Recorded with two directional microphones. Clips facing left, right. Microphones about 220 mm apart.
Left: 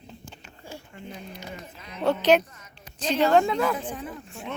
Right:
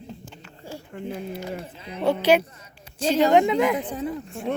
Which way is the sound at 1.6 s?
30° right (ahead or behind).